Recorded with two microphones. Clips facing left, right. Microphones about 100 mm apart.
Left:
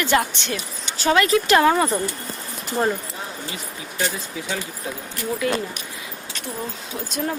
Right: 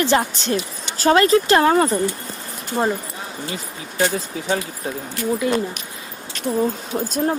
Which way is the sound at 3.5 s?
35° right (ahead or behind).